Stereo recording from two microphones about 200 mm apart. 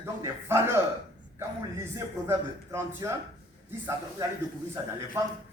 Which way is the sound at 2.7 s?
15° right (ahead or behind).